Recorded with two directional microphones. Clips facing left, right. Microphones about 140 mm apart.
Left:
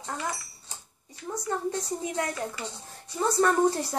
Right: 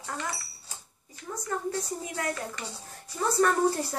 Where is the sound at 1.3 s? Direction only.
20° left (ahead or behind).